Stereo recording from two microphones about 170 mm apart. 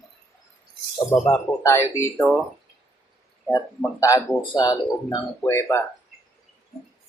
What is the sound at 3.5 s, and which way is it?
Speech, 20° left (ahead or behind).